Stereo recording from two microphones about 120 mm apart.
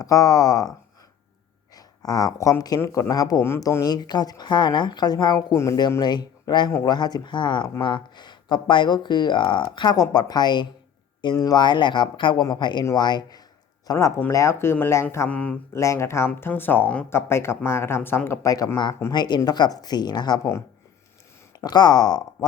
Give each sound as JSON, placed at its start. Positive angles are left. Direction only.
{"t": 0.0, "sound": "speech", "side_deg": 30}
{"t": 1.7, "sound": "speech", "side_deg": 30}
{"t": 15.3, "sound": "speech", "side_deg": 10}
{"t": 15.8, "sound": "speech", "side_deg": 25}
{"t": 18.4, "sound": "speech", "side_deg": 30}
{"t": 21.6, "sound": "speech", "side_deg": 35}